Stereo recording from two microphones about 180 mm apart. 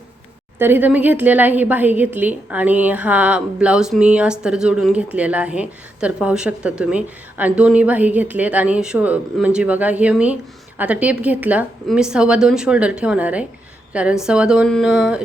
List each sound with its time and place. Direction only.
0.6 s a woman's voice: 10° right (ahead or behind)